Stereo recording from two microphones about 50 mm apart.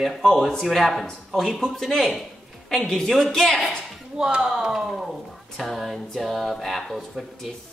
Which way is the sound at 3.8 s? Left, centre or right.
Centre.